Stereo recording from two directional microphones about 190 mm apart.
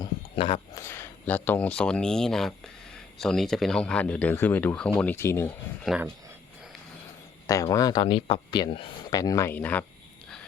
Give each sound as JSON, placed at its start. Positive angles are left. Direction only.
{"t": 0.0, "sound": "a sound", "side_deg": 25}
{"t": 0.8, "sound": "speech", "side_deg": 15}
{"t": 5.8, "sound": "speech", "side_deg": -5}
{"t": 7.4, "sound": "speech", "side_deg": 15}